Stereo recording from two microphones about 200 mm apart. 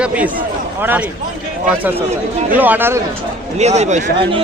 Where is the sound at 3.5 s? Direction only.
35° right (ahead or behind).